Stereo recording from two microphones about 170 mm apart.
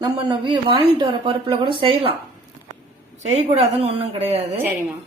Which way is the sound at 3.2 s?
40° right (ahead or behind).